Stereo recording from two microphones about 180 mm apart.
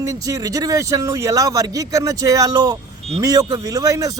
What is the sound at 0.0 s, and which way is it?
Speech, 20° right (ahead or behind).